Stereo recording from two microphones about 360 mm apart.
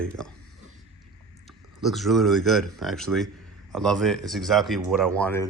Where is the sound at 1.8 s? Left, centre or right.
Centre.